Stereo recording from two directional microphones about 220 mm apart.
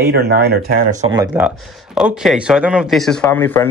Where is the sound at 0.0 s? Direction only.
45° right (ahead or behind).